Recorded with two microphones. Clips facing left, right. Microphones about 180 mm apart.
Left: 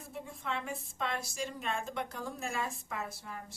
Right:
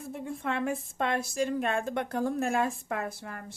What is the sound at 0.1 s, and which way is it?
A woman's voice, 55° right (ahead or behind).